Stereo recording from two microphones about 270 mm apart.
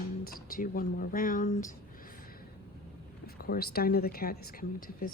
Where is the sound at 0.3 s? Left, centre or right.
Left.